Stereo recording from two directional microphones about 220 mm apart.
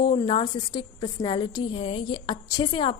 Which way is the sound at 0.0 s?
25° left (ahead or behind).